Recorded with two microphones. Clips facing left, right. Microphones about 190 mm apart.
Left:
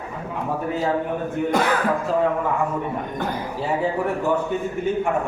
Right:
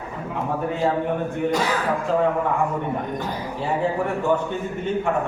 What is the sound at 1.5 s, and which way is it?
Speech, 55° left (ahead or behind).